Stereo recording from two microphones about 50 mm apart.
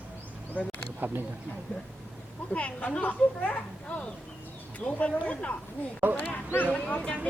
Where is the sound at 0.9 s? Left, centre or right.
Right.